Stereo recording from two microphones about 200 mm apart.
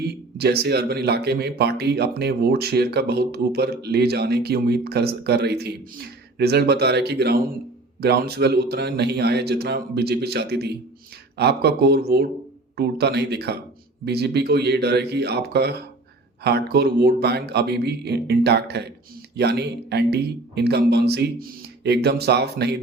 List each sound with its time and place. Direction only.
0.0 s speech: 55° right (ahead or behind)